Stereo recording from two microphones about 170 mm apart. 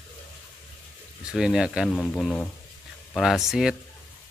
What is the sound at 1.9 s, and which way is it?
A man's voice, 10° left (ahead or behind).